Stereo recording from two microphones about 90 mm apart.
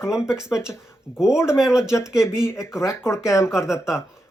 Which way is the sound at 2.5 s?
5° right (ahead or behind).